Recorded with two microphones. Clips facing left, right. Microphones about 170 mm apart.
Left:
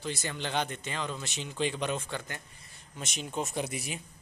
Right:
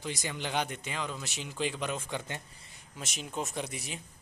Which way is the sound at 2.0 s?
20° right (ahead or behind).